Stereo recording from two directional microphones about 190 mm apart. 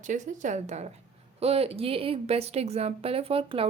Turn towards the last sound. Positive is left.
turn(degrees=-30)  # may be behind; listen again after turning